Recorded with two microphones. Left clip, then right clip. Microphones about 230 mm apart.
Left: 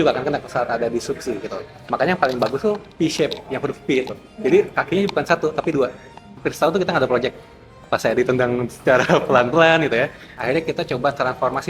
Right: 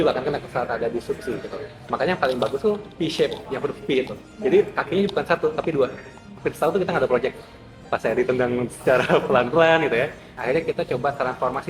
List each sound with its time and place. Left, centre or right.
0.0 s a man's voice: left